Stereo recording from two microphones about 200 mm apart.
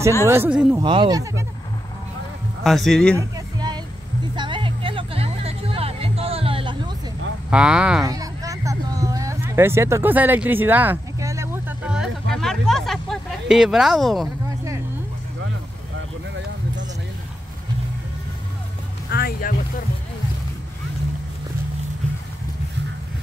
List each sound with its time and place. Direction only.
0.3 s speech: 10° right (ahead or behind)
0.7 s speech: 25° right (ahead or behind)
2.6 s speech: centre (ahead or behind)
3.2 s music: 20° right (ahead or behind)
7.4 s speech: 5° right (ahead or behind)
8.0 s a sound: 20° right (ahead or behind); by 14.3 s centre (ahead or behind)
19.0 s vehicle: 50° left (ahead or behind)